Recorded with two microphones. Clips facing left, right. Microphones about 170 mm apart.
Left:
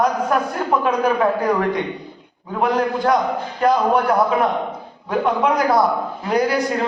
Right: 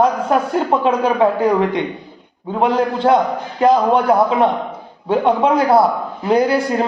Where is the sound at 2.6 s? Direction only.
25° right (ahead or behind).